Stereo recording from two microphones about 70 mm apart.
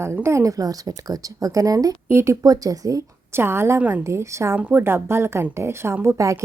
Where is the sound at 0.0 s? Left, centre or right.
Right.